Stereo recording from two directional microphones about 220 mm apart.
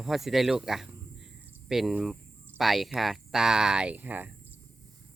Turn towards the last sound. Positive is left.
turn(degrees=-10)  # may be behind; listen again after turning